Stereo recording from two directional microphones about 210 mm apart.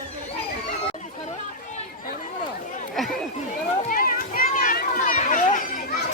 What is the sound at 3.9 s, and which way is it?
Children playing, 40° left (ahead or behind).